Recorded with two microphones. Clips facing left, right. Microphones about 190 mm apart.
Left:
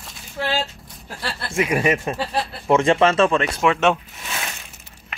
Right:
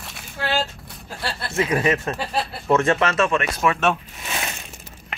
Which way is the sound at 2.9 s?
30° left (ahead or behind).